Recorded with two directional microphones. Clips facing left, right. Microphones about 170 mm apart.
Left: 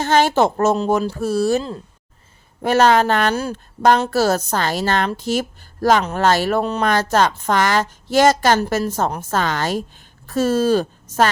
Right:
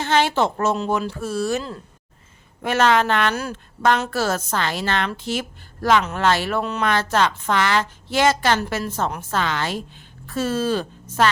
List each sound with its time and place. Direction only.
0.0 s speech: 40° left (ahead or behind)